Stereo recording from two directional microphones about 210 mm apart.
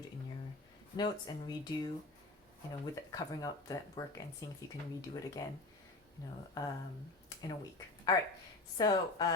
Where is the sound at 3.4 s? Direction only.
15° left (ahead or behind).